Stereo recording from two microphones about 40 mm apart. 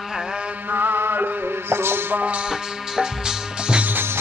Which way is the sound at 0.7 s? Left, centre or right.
Right.